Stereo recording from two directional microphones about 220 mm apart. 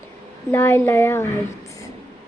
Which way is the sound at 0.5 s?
10° left (ahead or behind).